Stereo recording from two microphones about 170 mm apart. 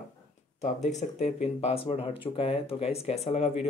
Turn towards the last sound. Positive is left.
turn(degrees=40)  # may be behind; listen again after turning